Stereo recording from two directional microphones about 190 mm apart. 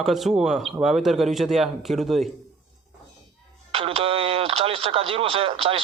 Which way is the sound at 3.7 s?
30° right (ahead or behind).